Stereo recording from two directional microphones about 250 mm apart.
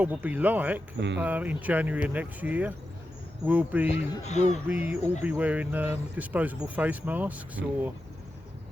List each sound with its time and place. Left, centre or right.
0.0 s speech: centre
0.9 s speech: right
1.2 s speech: centre
4.2 s speech: left
4.7 s speech: centre